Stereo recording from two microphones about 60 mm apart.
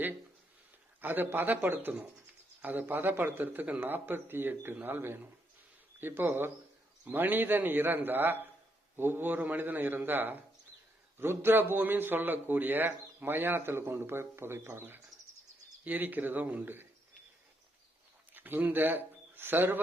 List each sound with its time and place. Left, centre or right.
1.0 s a man's voice: right
18.3 s speech: right